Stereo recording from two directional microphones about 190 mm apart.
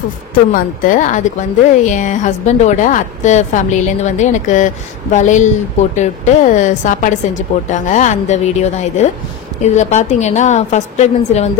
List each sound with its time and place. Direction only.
0.3 s a woman's voice: 45° left (ahead or behind)